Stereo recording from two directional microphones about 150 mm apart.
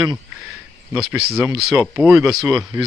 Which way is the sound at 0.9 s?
5° right (ahead or behind).